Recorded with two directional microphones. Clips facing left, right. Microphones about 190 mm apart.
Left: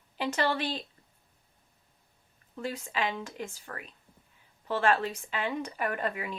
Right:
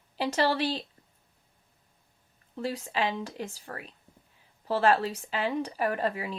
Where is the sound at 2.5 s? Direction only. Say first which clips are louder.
Right 3 dB; 35° right (ahead or behind).